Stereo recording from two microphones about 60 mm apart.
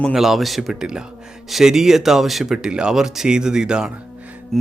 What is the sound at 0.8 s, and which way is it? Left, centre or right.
Speech, centre.